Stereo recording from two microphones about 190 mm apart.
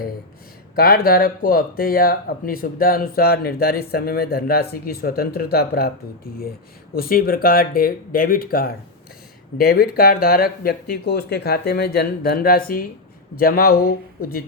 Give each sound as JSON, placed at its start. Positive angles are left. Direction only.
{"t": 0.8, "sound": "speech", "side_deg": 50}
{"t": 6.9, "sound": "speech", "side_deg": 50}